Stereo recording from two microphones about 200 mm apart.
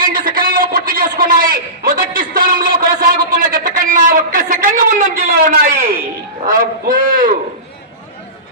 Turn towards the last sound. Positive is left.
turn(degrees=-45)  # may be behind; listen again after turning